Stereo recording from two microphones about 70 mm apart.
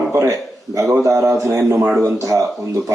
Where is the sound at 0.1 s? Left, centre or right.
Right.